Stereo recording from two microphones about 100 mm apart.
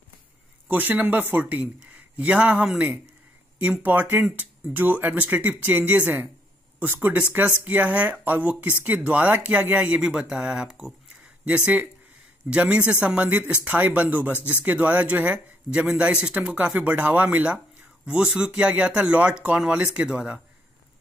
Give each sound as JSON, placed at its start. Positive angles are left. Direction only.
{"t": 0.7, "sound": "speech", "side_deg": -15}